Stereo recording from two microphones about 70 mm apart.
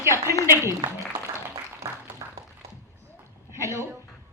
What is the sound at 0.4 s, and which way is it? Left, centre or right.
Speech, right.